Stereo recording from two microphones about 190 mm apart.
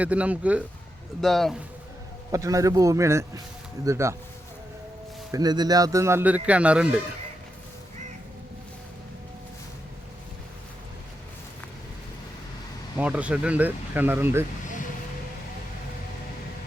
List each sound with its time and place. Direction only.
0.0 s a man's voice: 5° right (ahead or behind)
2.3 s speech: 15° right (ahead or behind)
5.3 s speech: 20° right (ahead or behind)
13.0 s speech: 5° right (ahead or behind)